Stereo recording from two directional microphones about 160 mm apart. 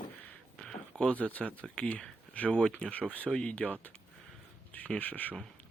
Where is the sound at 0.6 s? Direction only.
5° left (ahead or behind).